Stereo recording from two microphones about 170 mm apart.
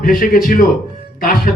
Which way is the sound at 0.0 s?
55° left (ahead or behind).